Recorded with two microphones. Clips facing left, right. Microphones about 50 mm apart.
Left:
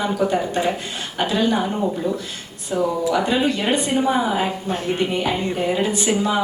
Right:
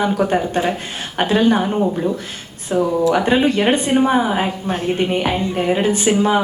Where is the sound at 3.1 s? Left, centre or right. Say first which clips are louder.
Right 4 dB; right.